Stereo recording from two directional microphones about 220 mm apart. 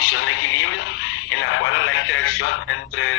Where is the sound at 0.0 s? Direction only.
70° left (ahead or behind).